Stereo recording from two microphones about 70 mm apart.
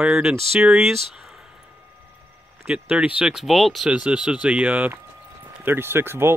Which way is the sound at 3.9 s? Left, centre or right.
Centre.